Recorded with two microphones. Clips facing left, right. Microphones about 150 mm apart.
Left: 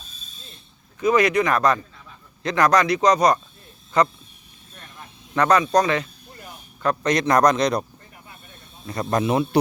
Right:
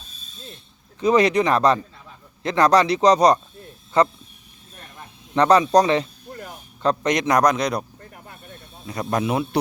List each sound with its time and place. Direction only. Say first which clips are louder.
0.9 s a man's voice: right 1 dB; 30° right (ahead or behind)
5.3 s a man's voice: right 3 dB; 30° right (ahead or behind)
6.8 s a man's voice: even; 20° right (ahead or behind)
8.1 s a sound: right 3 dB; 55° right (ahead or behind)
8.9 s speech: left 1 dB; 10° right (ahead or behind)